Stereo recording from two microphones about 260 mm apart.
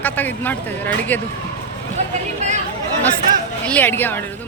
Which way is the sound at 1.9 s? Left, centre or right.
Right.